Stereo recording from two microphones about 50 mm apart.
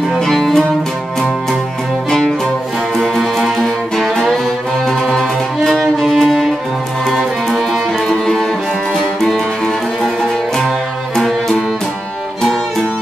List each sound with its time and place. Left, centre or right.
0.2 s music: centre
2.0 s music: centre
3.0 s music: centre
11.1 s music: centre